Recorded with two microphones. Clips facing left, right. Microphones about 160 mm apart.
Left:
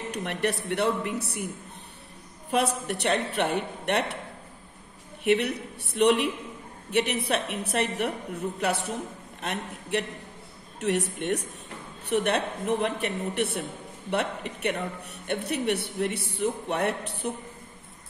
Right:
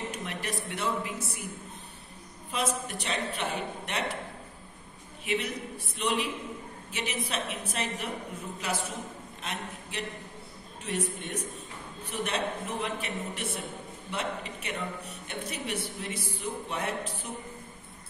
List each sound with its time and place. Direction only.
0.1 s a woman's voice: 60° left (ahead or behind)
2.5 s a woman's voice: 65° left (ahead or behind)
5.2 s a woman's voice: 65° left (ahead or behind)
10.8 s a woman's voice: 75° left (ahead or behind)